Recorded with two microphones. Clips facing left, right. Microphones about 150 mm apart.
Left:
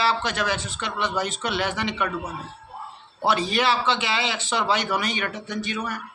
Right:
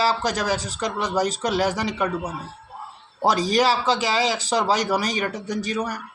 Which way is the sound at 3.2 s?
40° right (ahead or behind).